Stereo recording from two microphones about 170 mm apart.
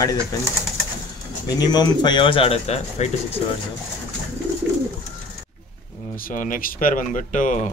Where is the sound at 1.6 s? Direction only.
25° left (ahead or behind).